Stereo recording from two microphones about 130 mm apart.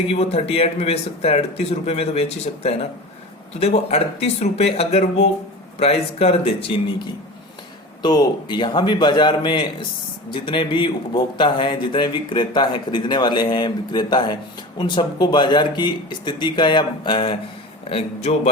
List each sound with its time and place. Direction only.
0.1 s speech: 55° left (ahead or behind)
8.0 s a man's voice: 30° left (ahead or behind); by 18.5 s 50° left (ahead or behind)